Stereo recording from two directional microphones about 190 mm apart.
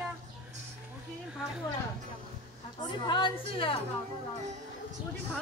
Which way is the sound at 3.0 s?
25° left (ahead or behind).